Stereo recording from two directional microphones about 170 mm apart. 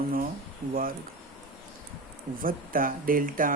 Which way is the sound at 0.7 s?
55° right (ahead or behind).